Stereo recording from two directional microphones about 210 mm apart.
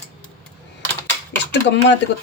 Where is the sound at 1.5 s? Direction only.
55° left (ahead or behind).